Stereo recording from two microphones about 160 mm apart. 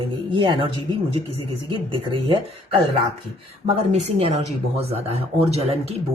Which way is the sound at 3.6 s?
45° right (ahead or behind).